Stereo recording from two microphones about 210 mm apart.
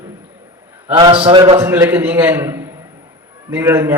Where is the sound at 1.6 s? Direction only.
10° right (ahead or behind).